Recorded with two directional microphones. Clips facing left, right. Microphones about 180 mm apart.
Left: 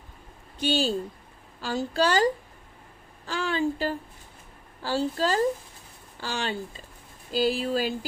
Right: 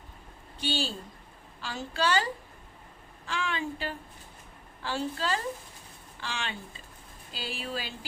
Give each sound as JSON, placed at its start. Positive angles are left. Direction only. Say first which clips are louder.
{"t": 0.6, "sound": "speech", "louder": "left 7 dB", "side_deg": 40}
{"t": 3.2, "sound": "speech", "louder": "left 6 dB", "side_deg": 35}